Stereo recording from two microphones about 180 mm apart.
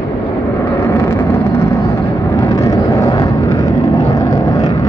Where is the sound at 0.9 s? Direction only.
15° left (ahead or behind).